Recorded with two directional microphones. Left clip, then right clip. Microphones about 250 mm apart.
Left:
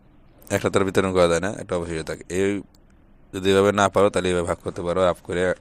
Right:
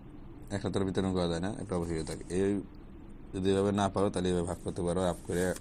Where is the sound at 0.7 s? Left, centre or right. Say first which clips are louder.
Left 11 dB; left.